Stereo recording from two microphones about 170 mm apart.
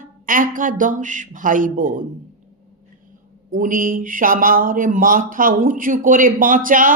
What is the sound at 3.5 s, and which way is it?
Speech, 55° right (ahead or behind).